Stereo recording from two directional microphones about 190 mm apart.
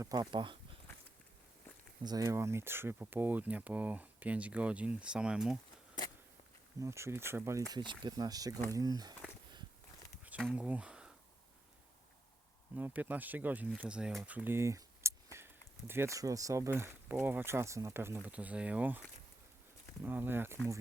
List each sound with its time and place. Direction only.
0.0 s speech: 20° right (ahead or behind)
2.0 s speech: 15° right (ahead or behind)
6.7 s speech: 15° right (ahead or behind)
7.7 s speech: 25° right (ahead or behind)
10.2 s a sound: 5° right (ahead or behind)
12.7 s speech: 10° right (ahead or behind)